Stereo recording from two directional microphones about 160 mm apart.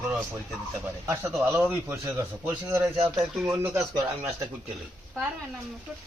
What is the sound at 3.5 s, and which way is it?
Speech, 20° right (ahead or behind).